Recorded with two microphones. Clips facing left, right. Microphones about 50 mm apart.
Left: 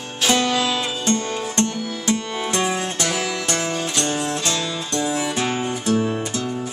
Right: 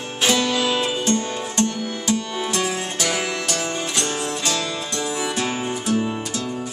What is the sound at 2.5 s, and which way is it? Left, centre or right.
Music, left.